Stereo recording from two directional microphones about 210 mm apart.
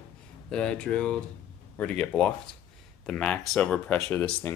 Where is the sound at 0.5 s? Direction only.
5° left (ahead or behind).